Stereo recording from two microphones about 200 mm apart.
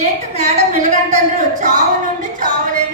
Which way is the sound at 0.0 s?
35° right (ahead or behind).